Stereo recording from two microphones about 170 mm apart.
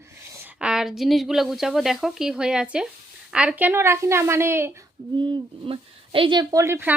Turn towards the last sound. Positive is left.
turn(degrees=-15)  # may be behind; listen again after turning